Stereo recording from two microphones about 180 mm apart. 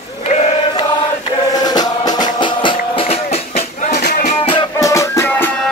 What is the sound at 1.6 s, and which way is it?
Music, 20° left (ahead or behind).